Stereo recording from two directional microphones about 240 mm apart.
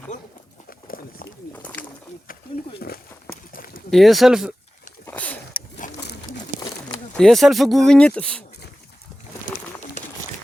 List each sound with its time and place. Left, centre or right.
0.7 s a sound: left
1.5 s wild animals: centre
2.8 s walk: left
3.9 s speech: centre
5.0 s a sound: centre
5.8 s pigeon: left
6.6 s bird: centre
7.1 s speech: centre